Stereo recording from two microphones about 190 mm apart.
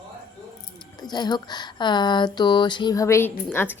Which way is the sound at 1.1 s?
20° left (ahead or behind).